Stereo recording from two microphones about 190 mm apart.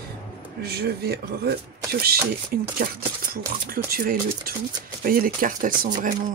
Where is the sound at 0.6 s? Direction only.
55° right (ahead or behind).